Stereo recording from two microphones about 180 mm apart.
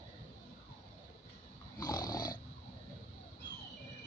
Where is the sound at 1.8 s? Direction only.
20° left (ahead or behind).